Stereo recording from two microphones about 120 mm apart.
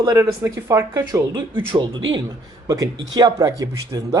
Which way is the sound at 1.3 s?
40° right (ahead or behind).